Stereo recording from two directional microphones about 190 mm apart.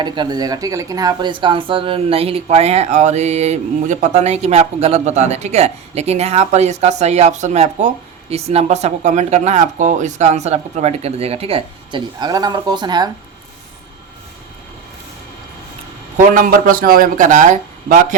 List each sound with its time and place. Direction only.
0.0 s speech: 20° right (ahead or behind)
16.1 s a man's voice: 45° right (ahead or behind)